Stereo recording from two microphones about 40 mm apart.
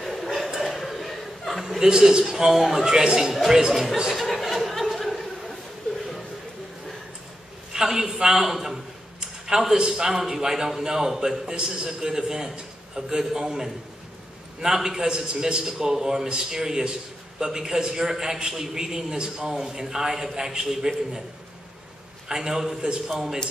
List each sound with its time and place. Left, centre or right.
0.0 s a sound: centre
0.5 s chuckle: centre
1.8 s a man's voice: centre
2.2 s a man's voice: centre
4.1 s chuckle: centre
7.7 s a man's voice: centre
22.3 s a man's voice: centre